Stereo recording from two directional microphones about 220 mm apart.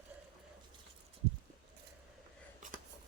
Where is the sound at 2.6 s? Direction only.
35° right (ahead or behind).